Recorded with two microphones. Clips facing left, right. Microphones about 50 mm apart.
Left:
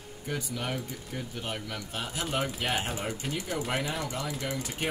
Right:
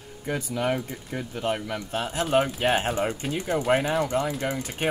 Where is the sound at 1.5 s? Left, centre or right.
Right.